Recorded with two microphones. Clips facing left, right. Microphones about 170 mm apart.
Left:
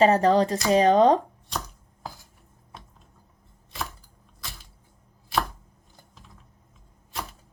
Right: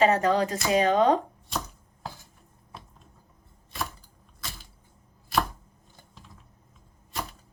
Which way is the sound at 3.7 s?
Centre (ahead or behind).